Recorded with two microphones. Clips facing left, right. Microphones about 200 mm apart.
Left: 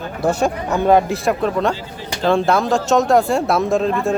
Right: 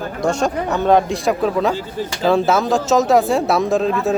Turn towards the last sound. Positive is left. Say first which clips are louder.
# even
turn(degrees=0)  # may be behind; listen again after turning